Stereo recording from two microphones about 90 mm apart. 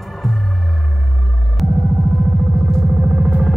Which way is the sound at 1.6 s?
Centre (ahead or behind).